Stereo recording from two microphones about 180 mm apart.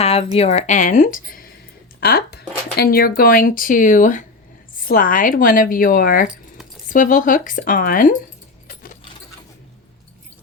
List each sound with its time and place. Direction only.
0.0 s speech: 35° left (ahead or behind); by 8.1 s 50° left (ahead or behind)
8.6 s sewing machine: 50° left (ahead or behind)